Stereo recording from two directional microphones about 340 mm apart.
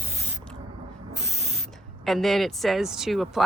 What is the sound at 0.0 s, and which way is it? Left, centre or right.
Spray, centre.